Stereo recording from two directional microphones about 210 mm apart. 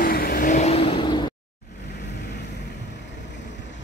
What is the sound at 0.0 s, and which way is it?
Vehicle, 45° left (ahead or behind).